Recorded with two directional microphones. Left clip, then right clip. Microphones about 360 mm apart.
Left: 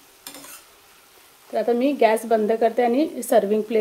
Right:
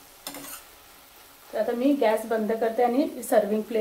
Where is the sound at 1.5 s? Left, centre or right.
Left.